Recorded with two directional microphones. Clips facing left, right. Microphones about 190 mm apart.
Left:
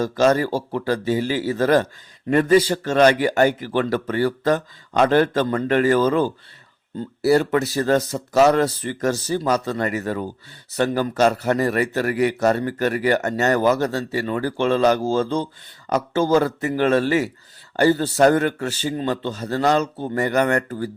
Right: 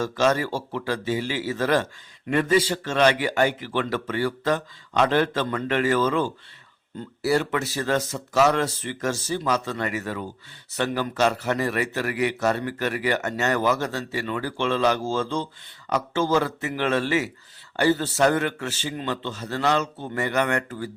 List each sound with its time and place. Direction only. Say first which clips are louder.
0.0 s a man's voice: left 5 dB; 40° left (ahead or behind)